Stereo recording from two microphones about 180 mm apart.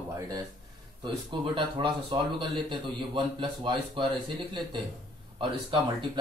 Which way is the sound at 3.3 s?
25° right (ahead or behind).